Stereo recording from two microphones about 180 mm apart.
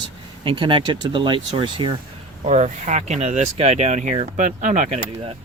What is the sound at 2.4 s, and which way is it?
Speech, 40° right (ahead or behind).